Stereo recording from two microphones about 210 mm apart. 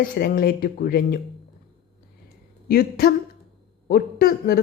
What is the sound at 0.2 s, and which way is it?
Speech, 45° left (ahead or behind).